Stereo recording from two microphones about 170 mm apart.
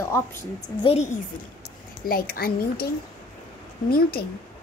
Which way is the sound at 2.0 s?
60° left (ahead or behind).